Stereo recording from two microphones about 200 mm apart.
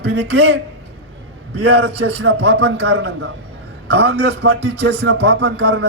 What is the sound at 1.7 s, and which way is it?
A man's voice, 55° right (ahead or behind).